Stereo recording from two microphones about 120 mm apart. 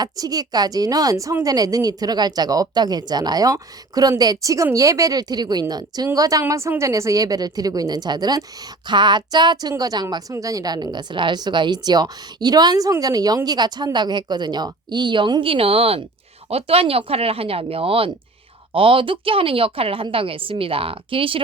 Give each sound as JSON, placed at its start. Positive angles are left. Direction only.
{"t": 0.0, "sound": "a woman's voice", "side_deg": -30}